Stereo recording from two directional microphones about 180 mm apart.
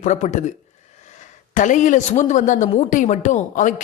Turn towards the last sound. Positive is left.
turn(degrees=45)  # may be behind; listen again after turning